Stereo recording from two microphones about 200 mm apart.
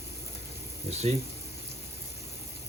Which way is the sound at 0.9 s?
35° right (ahead or behind).